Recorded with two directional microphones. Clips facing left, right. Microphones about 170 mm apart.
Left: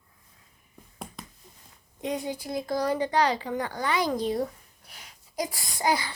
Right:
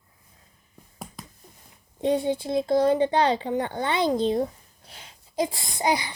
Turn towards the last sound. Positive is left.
turn(degrees=-20)  # may be behind; listen again after turning